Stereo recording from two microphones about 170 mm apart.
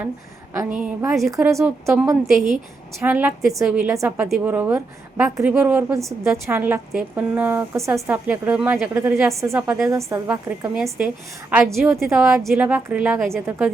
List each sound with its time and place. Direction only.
0.5 s a woman's voice: 15° right (ahead or behind)
1.1 s a woman's voice: centre (ahead or behind)
12.0 s a woman's voice: 15° right (ahead or behind); by 13.7 s 5° left (ahead or behind)